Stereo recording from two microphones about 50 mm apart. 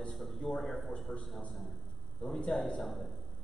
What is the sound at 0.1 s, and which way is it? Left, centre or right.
A man's voice, centre.